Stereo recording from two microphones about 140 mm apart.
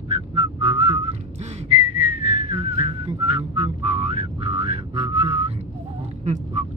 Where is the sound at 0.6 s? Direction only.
45° right (ahead or behind).